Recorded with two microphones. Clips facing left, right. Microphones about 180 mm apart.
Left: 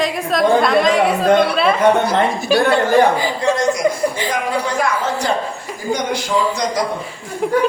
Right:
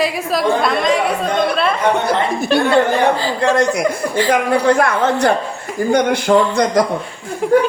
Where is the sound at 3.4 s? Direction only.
60° right (ahead or behind).